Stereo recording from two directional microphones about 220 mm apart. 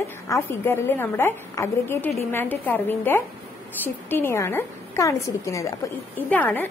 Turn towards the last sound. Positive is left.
turn(degrees=10)  # may be behind; listen again after turning